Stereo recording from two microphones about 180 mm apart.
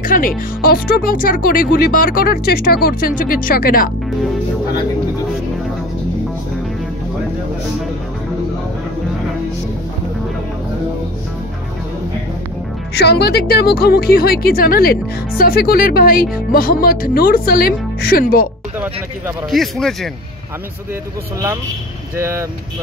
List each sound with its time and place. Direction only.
0.0 s speech: 50° left (ahead or behind)
12.9 s a woman's voice: 65° left (ahead or behind)
19.5 s a man's voice: centre (ahead or behind)
22.1 s speech: 15° right (ahead or behind)